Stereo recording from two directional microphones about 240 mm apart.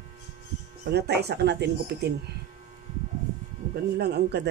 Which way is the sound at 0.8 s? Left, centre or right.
Right.